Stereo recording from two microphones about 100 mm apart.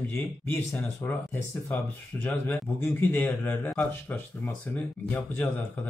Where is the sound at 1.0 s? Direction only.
20° left (ahead or behind).